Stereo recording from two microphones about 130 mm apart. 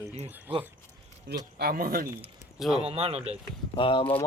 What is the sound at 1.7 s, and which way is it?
Speech, 90° right.